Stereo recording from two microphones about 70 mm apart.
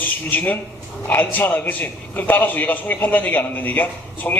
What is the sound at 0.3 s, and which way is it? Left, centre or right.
A man's voice, left.